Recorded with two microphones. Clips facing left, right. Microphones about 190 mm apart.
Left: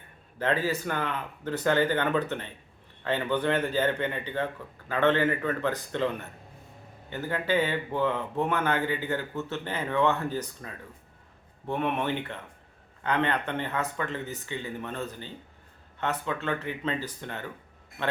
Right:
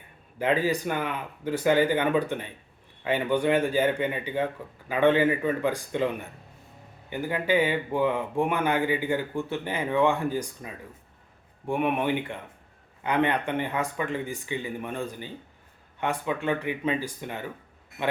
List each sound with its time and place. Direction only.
0.3 s speech: 15° right (ahead or behind)